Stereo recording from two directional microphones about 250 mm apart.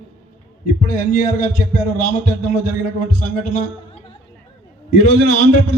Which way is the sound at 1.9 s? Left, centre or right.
Left.